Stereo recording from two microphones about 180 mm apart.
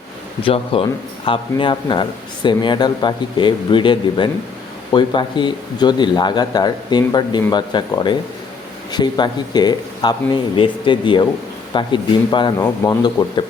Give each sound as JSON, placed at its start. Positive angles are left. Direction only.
{"t": 0.4, "sound": "a man's voice", "side_deg": 30}